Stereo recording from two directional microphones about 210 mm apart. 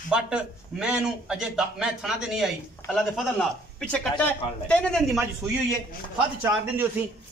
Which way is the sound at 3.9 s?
5° left (ahead or behind).